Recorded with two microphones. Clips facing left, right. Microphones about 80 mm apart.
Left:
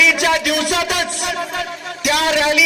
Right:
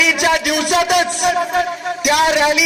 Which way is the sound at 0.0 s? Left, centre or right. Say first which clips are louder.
Even; centre.